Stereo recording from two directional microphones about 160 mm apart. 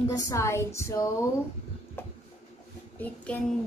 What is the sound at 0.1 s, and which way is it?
A woman's voice, 20° left (ahead or behind).